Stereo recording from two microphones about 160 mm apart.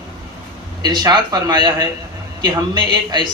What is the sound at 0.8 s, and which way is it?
A man's voice, 25° right (ahead or behind).